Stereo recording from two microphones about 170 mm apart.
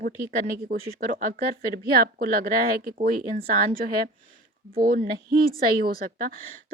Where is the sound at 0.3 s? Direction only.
55° right (ahead or behind).